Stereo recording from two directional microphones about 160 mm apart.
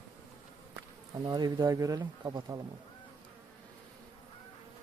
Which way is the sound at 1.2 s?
25° right (ahead or behind).